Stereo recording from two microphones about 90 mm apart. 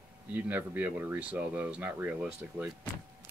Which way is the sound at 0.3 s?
20° right (ahead or behind).